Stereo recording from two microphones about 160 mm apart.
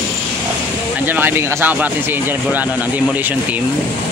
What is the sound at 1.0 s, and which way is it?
Speech, 10° right (ahead or behind).